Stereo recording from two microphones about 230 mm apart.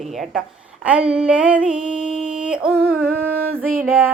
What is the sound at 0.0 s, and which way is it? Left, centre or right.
A woman's voice, centre.